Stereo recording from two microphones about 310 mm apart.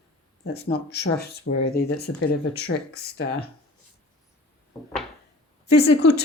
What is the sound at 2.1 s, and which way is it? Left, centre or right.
Speech, left.